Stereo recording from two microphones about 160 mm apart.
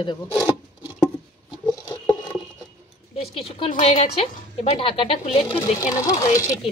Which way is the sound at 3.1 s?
40° left (ahead or behind).